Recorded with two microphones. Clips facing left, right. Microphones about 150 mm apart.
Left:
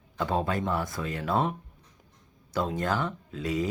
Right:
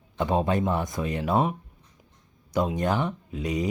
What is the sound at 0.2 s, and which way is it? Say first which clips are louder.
Speech: right 4 dB; 20° right (ahead or behind).